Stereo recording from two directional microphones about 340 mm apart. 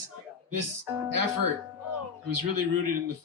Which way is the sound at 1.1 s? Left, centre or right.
Right.